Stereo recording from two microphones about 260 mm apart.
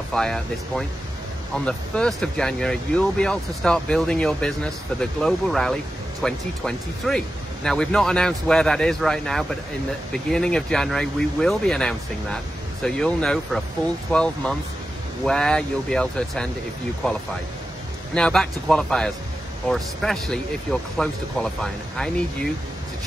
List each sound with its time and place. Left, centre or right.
0.1 s speech: centre
18.1 s speech: centre